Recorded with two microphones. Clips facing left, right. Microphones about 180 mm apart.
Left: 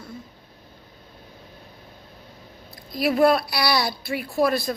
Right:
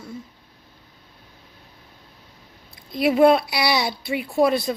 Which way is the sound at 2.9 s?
25° right (ahead or behind).